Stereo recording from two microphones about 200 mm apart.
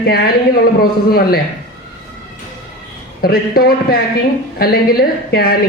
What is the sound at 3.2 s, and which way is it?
Speech, 50° left (ahead or behind).